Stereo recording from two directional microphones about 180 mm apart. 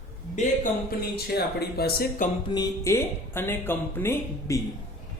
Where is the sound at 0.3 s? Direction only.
50° left (ahead or behind).